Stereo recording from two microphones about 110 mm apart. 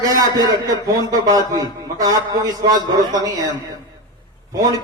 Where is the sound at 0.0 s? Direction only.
35° right (ahead or behind).